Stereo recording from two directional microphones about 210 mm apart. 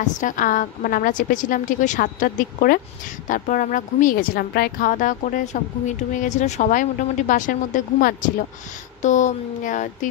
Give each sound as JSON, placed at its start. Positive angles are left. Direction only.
{"t": 0.0, "sound": "a woman's voice", "side_deg": 40}